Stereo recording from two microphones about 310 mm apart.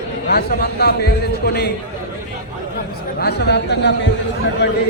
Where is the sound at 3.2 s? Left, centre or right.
Left.